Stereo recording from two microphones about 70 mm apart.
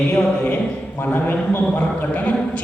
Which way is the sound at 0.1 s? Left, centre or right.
Left.